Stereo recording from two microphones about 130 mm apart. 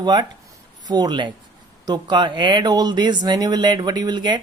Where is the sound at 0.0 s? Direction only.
30° right (ahead or behind).